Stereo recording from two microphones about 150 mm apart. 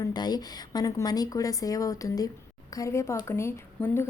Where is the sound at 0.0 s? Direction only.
25° left (ahead or behind).